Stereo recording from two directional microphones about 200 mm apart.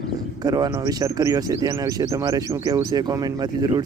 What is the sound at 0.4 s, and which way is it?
Speech, 20° right (ahead or behind).